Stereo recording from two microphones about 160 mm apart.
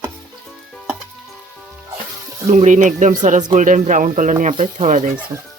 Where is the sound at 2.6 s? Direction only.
50° right (ahead or behind).